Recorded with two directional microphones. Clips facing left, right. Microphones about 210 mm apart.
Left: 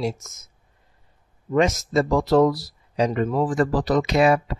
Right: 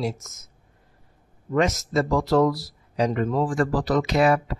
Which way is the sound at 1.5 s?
20° left (ahead or behind).